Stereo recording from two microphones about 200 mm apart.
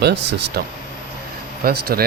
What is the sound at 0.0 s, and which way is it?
Speech, 55° right (ahead or behind).